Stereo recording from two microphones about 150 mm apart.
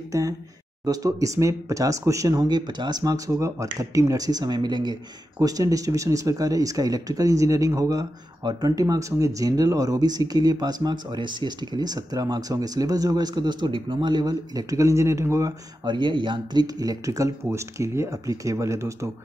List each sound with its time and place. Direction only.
0.8 s speech: 20° right (ahead or behind)